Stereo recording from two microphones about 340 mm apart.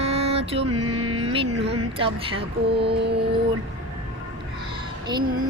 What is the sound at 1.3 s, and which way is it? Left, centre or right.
Speech, centre.